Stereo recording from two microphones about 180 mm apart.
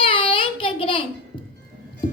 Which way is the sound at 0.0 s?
30° left (ahead or behind).